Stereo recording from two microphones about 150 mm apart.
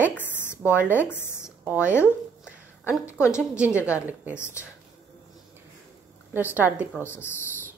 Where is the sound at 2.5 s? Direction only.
10° right (ahead or behind).